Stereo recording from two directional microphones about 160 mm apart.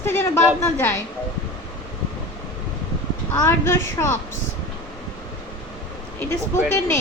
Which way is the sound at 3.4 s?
15° left (ahead or behind).